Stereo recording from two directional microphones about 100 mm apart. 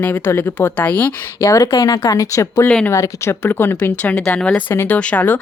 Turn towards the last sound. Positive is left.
turn(degrees=15)  # may be behind; listen again after turning